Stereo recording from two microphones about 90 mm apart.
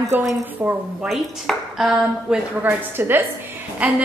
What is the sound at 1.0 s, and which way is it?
A woman's voice, centre (ahead or behind).